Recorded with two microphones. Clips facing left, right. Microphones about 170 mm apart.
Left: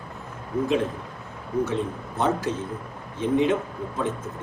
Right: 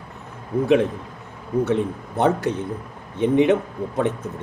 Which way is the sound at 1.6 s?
60° right (ahead or behind).